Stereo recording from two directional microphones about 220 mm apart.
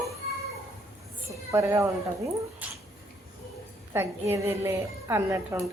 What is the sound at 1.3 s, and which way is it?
Speech, 15° right (ahead or behind).